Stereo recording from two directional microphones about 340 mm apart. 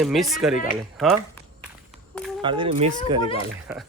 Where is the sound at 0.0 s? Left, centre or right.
Centre.